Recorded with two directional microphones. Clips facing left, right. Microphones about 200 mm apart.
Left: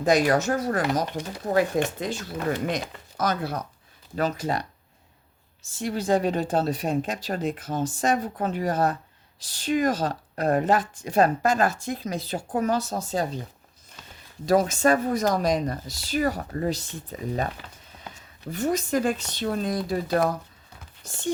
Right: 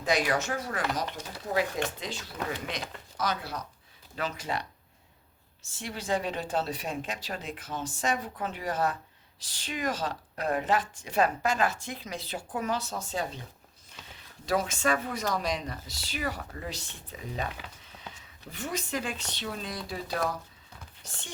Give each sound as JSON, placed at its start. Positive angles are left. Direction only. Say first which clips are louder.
{"t": 0.0, "sound": "speech", "louder": "left 7 dB", "side_deg": 45}
{"t": 5.7, "sound": "speech", "louder": "left 8 dB", "side_deg": 40}
{"t": 14.4, "sound": "speech", "louder": "left 8 dB", "side_deg": 40}
{"t": 18.5, "sound": "speech", "louder": "left 9 dB", "side_deg": 40}